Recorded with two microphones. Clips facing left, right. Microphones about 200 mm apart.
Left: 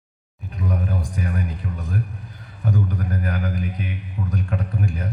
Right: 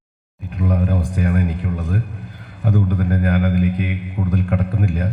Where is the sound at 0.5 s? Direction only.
55° right (ahead or behind).